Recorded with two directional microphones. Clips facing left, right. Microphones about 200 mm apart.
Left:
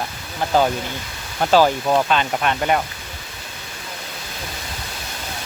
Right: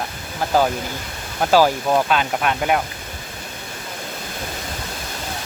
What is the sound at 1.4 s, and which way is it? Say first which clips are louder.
Speech: even; 5° right (ahead or behind).